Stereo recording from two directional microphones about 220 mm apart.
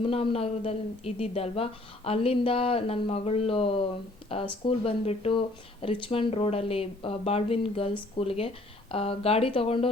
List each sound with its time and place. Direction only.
0.0 s speech: 25° left (ahead or behind)